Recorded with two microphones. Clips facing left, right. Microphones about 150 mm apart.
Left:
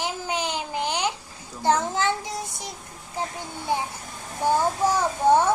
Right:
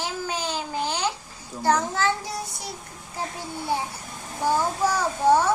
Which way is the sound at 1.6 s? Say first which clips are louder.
Even; 20° left (ahead or behind).